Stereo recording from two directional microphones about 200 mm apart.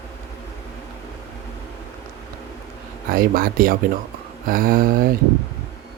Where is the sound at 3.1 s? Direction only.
45° right (ahead or behind).